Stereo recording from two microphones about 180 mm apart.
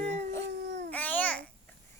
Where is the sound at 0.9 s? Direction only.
10° left (ahead or behind).